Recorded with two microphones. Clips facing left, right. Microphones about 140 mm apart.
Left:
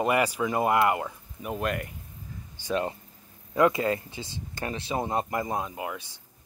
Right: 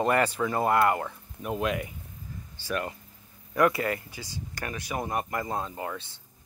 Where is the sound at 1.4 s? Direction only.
Centre (ahead or behind).